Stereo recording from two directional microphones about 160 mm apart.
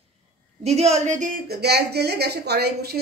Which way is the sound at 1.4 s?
90° right.